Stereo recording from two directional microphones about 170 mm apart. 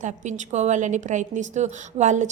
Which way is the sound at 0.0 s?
45° right (ahead or behind).